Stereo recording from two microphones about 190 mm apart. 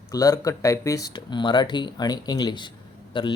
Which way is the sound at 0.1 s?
20° left (ahead or behind).